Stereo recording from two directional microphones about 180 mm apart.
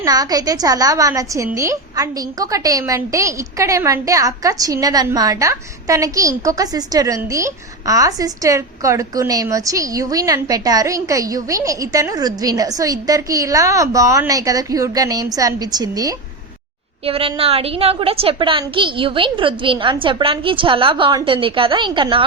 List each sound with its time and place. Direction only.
0.0 s a woman's voice: 20° right (ahead or behind)
17.1 s a woman's voice: 30° right (ahead or behind)